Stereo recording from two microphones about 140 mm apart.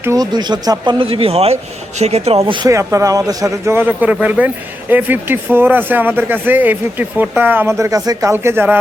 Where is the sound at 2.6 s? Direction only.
20° right (ahead or behind).